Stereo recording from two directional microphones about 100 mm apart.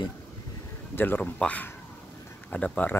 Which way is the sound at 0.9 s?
20° left (ahead or behind).